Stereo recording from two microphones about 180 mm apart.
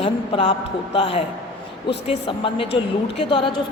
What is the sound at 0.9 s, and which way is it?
A man's voice, 30° left (ahead or behind).